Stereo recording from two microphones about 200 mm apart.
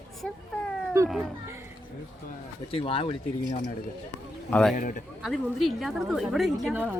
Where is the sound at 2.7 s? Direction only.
25° left (ahead or behind).